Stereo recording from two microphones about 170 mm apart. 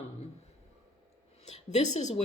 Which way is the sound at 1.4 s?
40° left (ahead or behind).